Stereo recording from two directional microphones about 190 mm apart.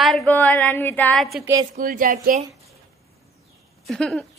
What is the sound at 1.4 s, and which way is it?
Speech, 15° right (ahead or behind).